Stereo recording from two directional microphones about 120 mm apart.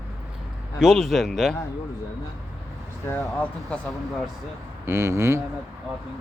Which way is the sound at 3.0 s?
15° left (ahead or behind).